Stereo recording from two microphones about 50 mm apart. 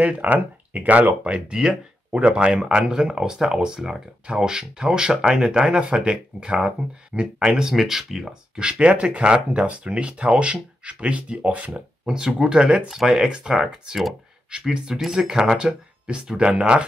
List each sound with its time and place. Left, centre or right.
0.0 s speech: right
12.1 s speech: centre